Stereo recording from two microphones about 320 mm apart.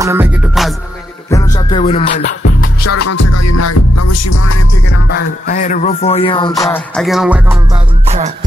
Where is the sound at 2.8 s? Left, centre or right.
Left.